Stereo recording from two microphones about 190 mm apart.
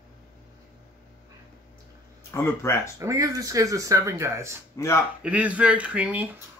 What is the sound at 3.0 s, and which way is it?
Speech, 15° right (ahead or behind).